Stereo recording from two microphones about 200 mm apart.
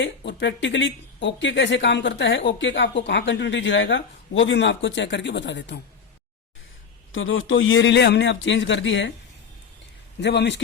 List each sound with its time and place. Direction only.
0.0 s speech: 65° left (ahead or behind)
7.1 s a man's voice: 75° left (ahead or behind)
10.2 s speech: 60° left (ahead or behind)